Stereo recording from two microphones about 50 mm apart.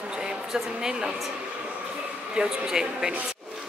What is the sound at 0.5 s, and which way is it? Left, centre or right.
Speech, centre.